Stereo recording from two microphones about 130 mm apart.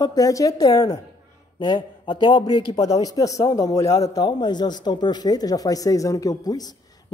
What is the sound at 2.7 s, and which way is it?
Speech, 30° left (ahead or behind).